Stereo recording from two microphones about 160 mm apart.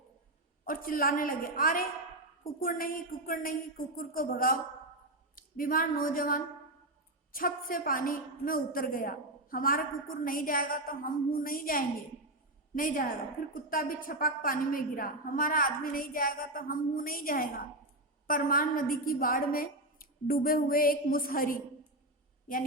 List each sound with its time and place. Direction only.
0.6 s a woman's voice: 60° left (ahead or behind)